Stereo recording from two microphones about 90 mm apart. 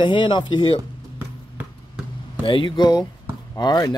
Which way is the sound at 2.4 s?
65° left (ahead or behind).